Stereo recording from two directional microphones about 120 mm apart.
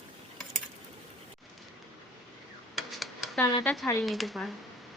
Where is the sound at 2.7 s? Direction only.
Centre (ahead or behind).